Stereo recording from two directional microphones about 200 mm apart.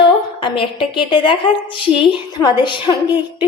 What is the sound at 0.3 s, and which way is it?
A woman's voice, 25° left (ahead or behind).